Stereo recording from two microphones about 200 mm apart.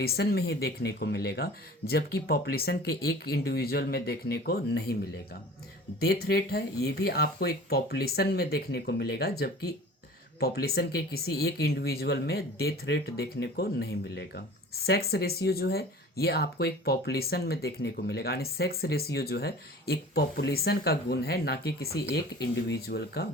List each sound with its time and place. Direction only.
0.0 s speech: 50° left (ahead or behind)